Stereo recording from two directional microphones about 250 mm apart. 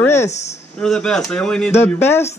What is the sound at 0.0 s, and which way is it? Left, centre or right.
Speech, centre.